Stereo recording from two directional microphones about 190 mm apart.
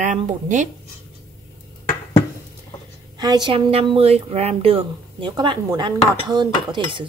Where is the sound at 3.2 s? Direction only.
20° right (ahead or behind).